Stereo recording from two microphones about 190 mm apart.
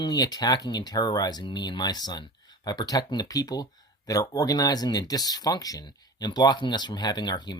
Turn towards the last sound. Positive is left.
turn(degrees=20)  # may be behind; listen again after turning